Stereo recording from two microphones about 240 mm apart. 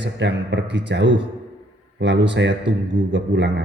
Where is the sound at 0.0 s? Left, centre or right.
Right.